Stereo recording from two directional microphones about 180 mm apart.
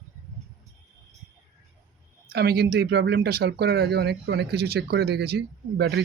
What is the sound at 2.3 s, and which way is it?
Speech, 60° right (ahead or behind).